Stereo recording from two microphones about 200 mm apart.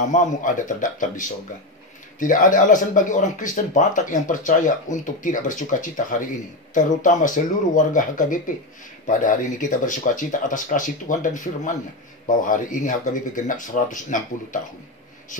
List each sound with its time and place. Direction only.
0.1 s speech: 40° left (ahead or behind)